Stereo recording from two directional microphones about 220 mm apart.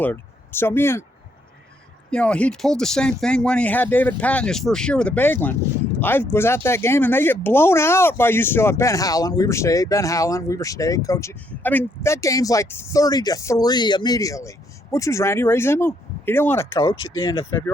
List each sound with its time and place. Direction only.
0.0 s speech: 10° left (ahead or behind)
2.0 s speech: 5° left (ahead or behind)